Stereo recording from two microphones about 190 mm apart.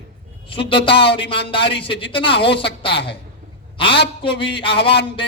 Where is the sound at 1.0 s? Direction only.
60° left (ahead or behind).